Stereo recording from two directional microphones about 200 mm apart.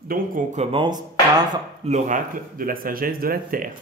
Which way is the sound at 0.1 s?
35° right (ahead or behind).